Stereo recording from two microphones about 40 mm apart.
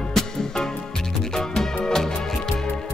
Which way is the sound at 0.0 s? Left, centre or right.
Centre.